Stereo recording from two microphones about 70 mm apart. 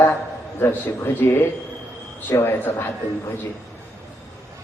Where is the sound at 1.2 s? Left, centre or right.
Left.